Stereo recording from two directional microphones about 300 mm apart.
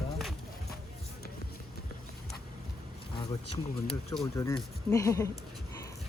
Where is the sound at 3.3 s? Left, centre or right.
Centre.